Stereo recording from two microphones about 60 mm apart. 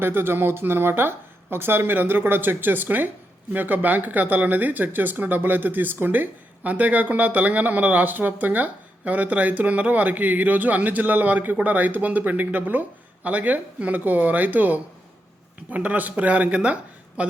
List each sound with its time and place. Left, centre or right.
0.0 s speech: right